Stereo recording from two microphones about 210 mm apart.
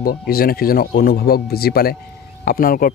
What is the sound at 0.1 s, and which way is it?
A man's voice, 45° left (ahead or behind).